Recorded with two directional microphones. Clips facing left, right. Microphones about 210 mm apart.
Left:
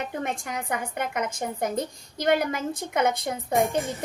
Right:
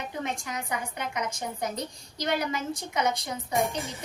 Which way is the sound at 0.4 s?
55° left (ahead or behind).